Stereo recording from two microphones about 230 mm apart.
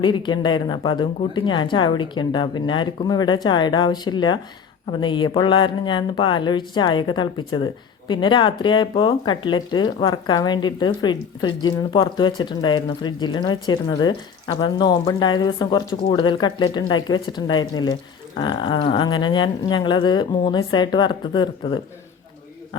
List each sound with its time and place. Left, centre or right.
0.0 s speech: centre